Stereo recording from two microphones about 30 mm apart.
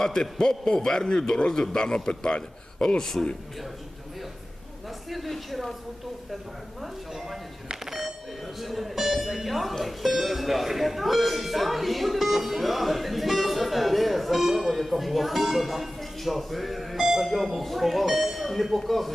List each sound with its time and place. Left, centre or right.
0.0 s a man's voice: centre
3.0 s a man's voice: centre
5.0 s speech: centre
6.8 s speech: centre
7.9 s a sound: centre
8.6 s music: centre
9.8 s speech: centre